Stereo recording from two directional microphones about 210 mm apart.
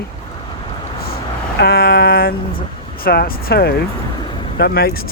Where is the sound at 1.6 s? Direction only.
50° left (ahead or behind).